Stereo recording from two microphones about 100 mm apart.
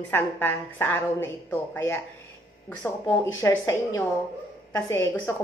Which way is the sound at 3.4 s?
30° left (ahead or behind).